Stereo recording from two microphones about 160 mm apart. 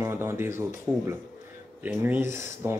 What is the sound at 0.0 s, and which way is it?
Speech, 15° right (ahead or behind).